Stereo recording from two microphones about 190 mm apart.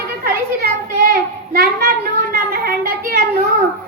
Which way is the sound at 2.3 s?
50° right (ahead or behind).